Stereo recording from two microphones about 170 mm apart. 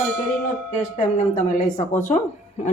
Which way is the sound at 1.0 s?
50° left (ahead or behind).